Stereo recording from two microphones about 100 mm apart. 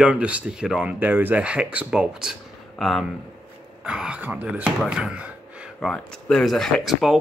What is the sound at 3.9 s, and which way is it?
Speech, 10° right (ahead or behind).